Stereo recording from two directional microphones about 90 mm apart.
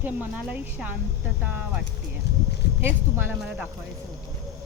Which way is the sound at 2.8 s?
25° right (ahead or behind).